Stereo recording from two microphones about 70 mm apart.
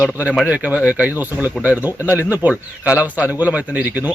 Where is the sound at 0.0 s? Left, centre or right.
Centre.